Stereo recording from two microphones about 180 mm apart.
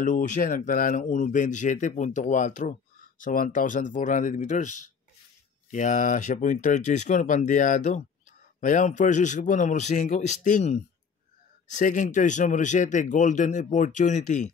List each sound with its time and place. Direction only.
0.0 s speech: 45° left (ahead or behind)